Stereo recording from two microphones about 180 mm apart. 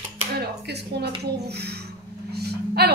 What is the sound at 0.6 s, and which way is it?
A woman's voice, 65° right (ahead or behind).